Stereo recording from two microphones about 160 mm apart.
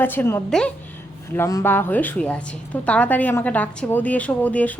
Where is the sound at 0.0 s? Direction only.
15° left (ahead or behind).